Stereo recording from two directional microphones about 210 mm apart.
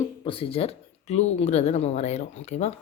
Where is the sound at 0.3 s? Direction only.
25° left (ahead or behind).